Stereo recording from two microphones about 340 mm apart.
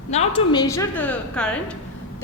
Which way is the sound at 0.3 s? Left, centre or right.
Centre.